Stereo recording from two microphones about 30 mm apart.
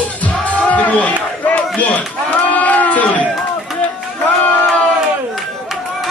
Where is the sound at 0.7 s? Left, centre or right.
Left.